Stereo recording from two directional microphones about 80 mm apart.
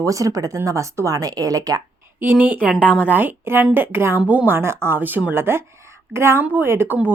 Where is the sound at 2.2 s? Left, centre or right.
Right.